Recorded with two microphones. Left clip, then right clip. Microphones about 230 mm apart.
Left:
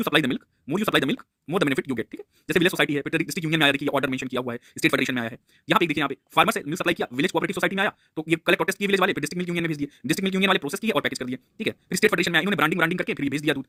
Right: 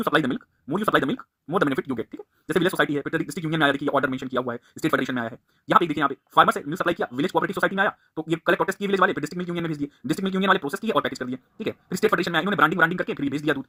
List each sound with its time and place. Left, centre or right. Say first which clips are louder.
0.0 s speech: even; left